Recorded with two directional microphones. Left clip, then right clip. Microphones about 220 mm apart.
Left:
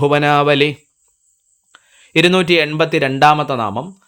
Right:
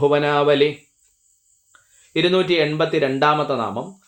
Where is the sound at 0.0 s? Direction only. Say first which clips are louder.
Left 4 dB; 50° left (ahead or behind).